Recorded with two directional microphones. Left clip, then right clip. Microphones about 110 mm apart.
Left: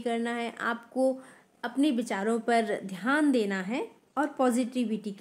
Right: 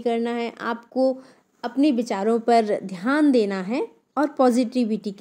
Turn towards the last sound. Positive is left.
turn(degrees=-40)  # may be behind; listen again after turning